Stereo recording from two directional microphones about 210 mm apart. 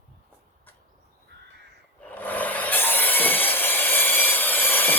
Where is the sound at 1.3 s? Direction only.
55° right (ahead or behind).